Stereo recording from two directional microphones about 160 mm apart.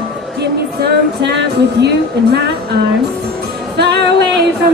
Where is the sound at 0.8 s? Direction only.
90° right.